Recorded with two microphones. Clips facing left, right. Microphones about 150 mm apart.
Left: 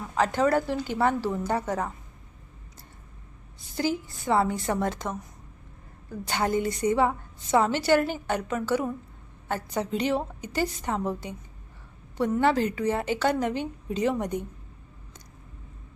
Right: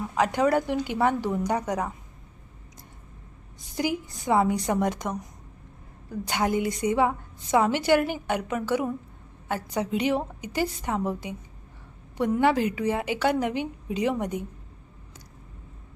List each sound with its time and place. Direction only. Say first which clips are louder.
0.1 s a woman's voice: even; 10° right (ahead or behind)
3.8 s a woman's voice: even; 15° right (ahead or behind)